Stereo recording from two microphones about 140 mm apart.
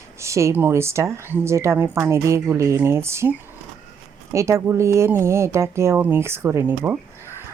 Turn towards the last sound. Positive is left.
turn(degrees=-20)  # may be behind; listen again after turning